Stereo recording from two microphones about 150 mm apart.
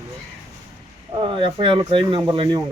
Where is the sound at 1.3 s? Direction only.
35° right (ahead or behind).